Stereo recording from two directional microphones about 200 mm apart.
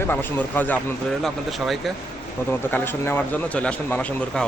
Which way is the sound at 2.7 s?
10° left (ahead or behind).